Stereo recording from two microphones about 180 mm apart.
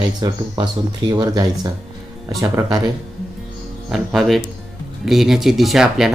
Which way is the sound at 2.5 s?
25° right (ahead or behind).